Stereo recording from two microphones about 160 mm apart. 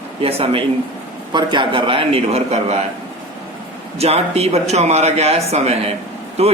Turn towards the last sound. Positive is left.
turn(degrees=-40)  # may be behind; listen again after turning